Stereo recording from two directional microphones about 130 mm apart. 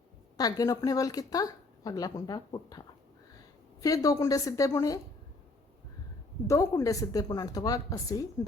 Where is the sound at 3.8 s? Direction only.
25° left (ahead or behind).